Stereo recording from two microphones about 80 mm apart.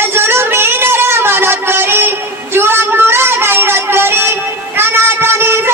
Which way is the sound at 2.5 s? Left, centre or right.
Right.